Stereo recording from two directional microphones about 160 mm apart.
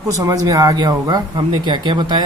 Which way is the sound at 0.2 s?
20° right (ahead or behind).